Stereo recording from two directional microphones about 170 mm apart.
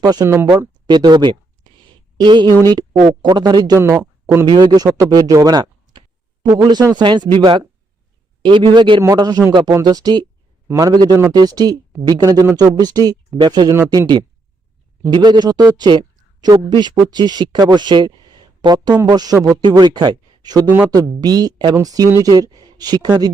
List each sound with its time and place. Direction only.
0.0 s a man's voice: 20° right (ahead or behind)